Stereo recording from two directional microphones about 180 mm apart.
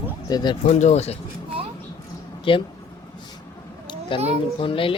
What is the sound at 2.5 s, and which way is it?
Speech, 30° left (ahead or behind).